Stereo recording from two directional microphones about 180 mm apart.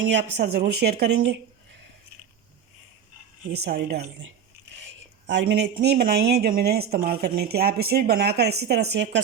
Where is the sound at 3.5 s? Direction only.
65° right (ahead or behind).